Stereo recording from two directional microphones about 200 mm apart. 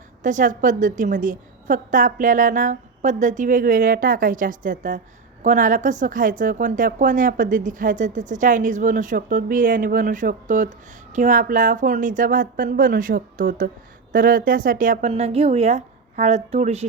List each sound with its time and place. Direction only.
0.2 s a woman's voice: 40° right (ahead or behind)